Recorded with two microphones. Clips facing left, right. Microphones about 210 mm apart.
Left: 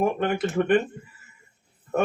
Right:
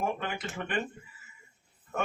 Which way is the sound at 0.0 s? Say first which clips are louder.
Left 10 dB; 60° left (ahead or behind).